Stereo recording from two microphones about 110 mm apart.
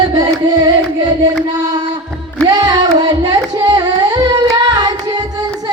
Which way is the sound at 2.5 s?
40° right (ahead or behind).